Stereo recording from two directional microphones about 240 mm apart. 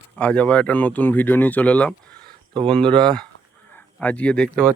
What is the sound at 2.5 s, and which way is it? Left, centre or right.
Speech, right.